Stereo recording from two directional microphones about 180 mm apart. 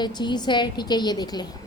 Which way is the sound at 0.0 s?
25° left (ahead or behind).